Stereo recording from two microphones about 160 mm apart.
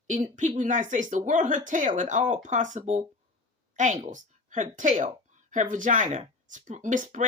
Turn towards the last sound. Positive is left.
turn(degrees=-55)  # may be behind; listen again after turning